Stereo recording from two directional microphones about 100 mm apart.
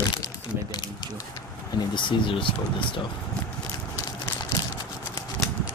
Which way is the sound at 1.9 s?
55° left (ahead or behind).